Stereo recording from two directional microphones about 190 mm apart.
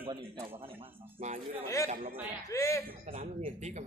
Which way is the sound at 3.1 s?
30° right (ahead or behind).